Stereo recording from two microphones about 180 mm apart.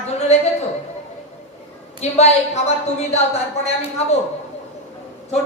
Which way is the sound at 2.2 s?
35° left (ahead or behind).